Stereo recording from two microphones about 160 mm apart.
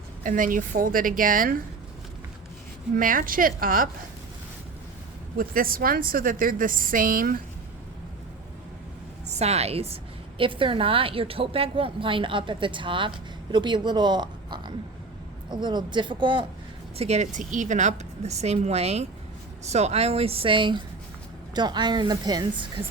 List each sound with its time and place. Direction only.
0.2 s a woman's voice: 55° right (ahead or behind)
2.9 s a woman's voice: 60° right (ahead or behind)
5.4 s a woman's voice: 65° right (ahead or behind)
9.3 s a woman's voice: 40° right (ahead or behind)
17.0 s a woman's voice: 45° right (ahead or behind); by 22.6 s 25° right (ahead or behind)